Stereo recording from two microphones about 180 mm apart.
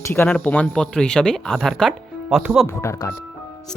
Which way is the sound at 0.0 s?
10° left (ahead or behind).